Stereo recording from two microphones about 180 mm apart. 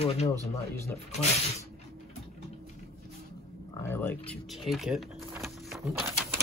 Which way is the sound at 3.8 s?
10° left (ahead or behind).